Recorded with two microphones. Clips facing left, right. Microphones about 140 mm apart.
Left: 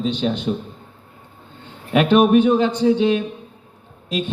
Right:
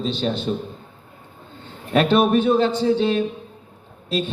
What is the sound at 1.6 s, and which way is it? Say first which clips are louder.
A man's voice: left 1 dB; 15° left (ahead or behind).